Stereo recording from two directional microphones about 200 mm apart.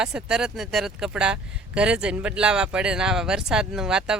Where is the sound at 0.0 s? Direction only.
5° right (ahead or behind).